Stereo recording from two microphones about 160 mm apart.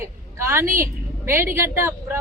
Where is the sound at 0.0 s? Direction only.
15° right (ahead or behind).